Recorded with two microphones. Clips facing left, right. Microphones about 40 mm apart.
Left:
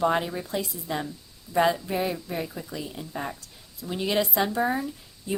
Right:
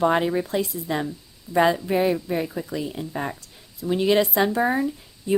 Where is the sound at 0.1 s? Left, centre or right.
Right.